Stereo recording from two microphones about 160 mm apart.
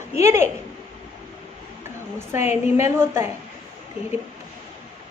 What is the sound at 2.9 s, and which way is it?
Speech, 15° right (ahead or behind).